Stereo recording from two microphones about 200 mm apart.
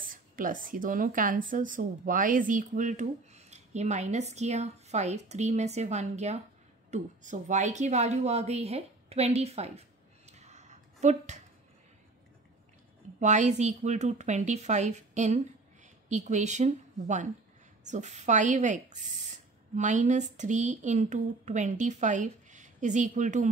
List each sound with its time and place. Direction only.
0.1 s a woman's voice: 40° right (ahead or behind)
13.2 s speech: 35° right (ahead or behind)